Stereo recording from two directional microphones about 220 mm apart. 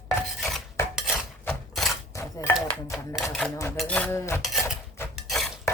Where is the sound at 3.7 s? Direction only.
5° left (ahead or behind).